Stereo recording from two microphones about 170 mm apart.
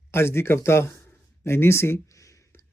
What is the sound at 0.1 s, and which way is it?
Speech, 15° left (ahead or behind).